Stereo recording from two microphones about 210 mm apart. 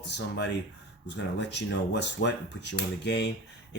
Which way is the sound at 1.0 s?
55° left (ahead or behind).